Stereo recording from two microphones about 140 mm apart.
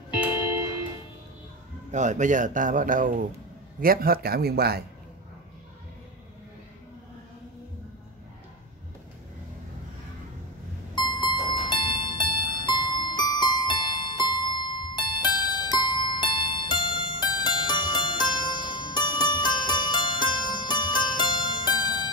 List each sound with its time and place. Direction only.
1.9 s speech: 60° right (ahead or behind)
3.8 s a man's voice: 90° right
11.0 s music: 30° left (ahead or behind)